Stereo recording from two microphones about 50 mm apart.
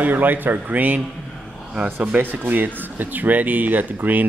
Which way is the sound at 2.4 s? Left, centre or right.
Right.